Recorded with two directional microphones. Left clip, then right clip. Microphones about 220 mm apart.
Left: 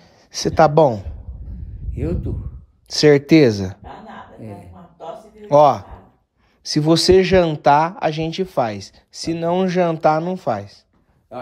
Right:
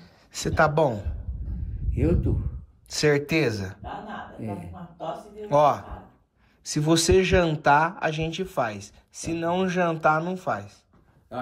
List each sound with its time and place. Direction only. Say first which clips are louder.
0.0 s a man's voice: left 8 dB; 30° left (ahead or behind)
2.0 s speech: even; centre (ahead or behind)
2.9 s speech: left 10 dB; 30° left (ahead or behind)
4.4 s speech: right 1 dB; centre (ahead or behind)
4.6 s a sound: even; 40° left (ahead or behind)
6.6 s speech: left 7 dB; 30° left (ahead or behind)